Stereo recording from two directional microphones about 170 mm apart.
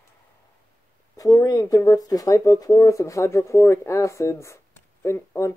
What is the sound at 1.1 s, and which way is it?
Speech, 20° left (ahead or behind).